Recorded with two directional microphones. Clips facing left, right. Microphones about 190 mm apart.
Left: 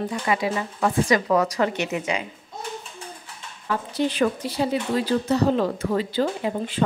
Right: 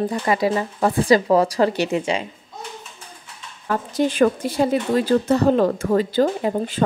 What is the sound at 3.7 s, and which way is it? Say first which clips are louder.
Speech: right 3 dB; 45° right (ahead or behind).